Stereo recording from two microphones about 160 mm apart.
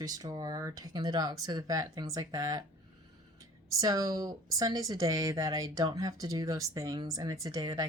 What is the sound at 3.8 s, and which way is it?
Speech, 20° right (ahead or behind).